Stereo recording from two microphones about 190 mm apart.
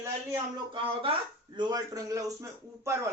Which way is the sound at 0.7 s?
30° right (ahead or behind).